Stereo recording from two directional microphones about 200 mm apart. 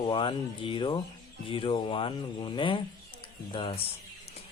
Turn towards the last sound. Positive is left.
turn(degrees=25)  # may be behind; listen again after turning